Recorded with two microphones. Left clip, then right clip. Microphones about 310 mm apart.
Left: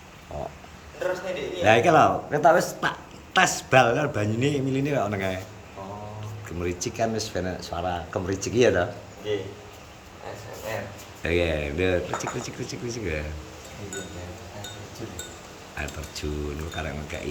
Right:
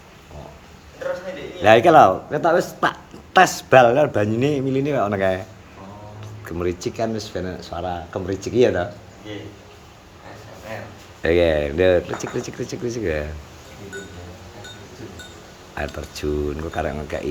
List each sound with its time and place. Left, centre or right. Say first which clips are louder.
1.0 s a sound: right 1 dB; left
1.6 s speech: right 6 dB; centre
6.4 s speech: right 6 dB; centre
11.2 s speech: right 8 dB; centre
15.7 s speech: right 6 dB; centre